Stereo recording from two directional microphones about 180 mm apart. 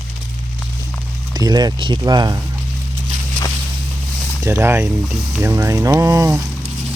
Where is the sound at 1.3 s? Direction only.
20° right (ahead or behind).